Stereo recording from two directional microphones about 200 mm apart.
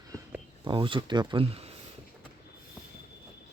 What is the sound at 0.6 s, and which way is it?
Speech, 25° right (ahead or behind).